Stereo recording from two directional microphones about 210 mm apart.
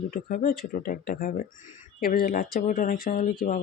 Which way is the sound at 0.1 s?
45° left (ahead or behind).